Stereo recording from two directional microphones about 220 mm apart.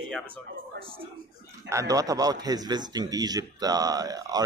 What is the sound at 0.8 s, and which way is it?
Speech, 25° right (ahead or behind).